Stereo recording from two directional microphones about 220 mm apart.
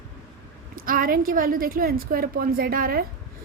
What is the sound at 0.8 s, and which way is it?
A woman's voice, 40° right (ahead or behind).